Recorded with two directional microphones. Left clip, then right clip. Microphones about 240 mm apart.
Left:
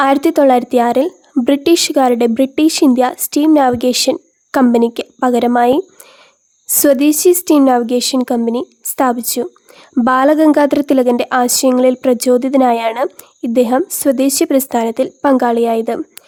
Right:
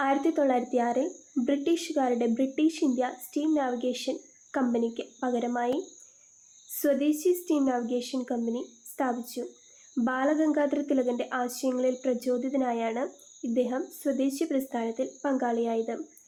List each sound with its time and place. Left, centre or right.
0.0 s a woman's voice: left